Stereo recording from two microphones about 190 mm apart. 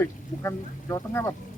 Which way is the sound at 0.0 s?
15° left (ahead or behind).